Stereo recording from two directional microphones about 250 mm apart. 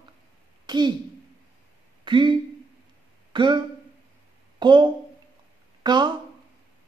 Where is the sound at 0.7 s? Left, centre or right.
Centre.